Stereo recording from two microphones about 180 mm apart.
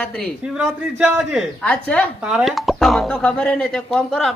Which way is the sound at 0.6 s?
5° right (ahead or behind).